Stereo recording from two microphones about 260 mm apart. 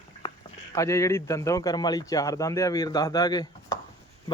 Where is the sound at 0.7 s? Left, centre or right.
Centre.